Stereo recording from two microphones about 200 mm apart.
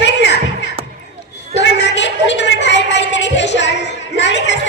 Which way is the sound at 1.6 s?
60° left (ahead or behind).